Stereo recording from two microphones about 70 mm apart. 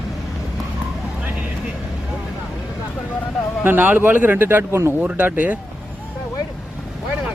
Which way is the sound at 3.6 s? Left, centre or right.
Right.